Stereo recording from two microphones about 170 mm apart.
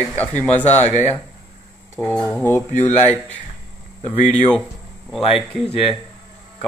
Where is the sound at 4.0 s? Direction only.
40° left (ahead or behind).